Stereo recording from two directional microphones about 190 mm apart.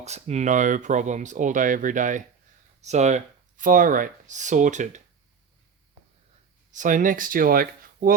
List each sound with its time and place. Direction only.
0.0 s speech: 35° right (ahead or behind)
6.7 s speech: 40° right (ahead or behind)